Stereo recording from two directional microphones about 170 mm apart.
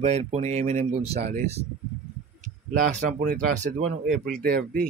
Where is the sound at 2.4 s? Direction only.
55° right (ahead or behind).